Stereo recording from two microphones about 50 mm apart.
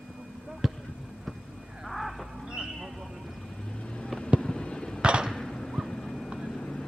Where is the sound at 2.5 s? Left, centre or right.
Centre.